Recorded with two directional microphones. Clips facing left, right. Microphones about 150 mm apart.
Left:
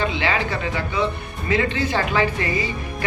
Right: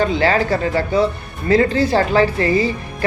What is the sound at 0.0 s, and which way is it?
A woman's voice, 40° right (ahead or behind).